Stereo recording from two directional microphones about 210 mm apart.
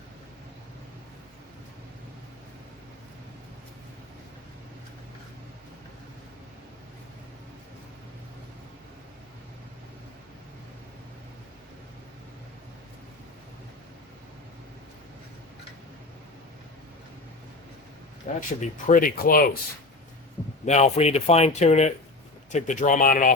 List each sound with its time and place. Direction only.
18.3 s speech: 40° left (ahead or behind)
20.7 s speech: 35° left (ahead or behind)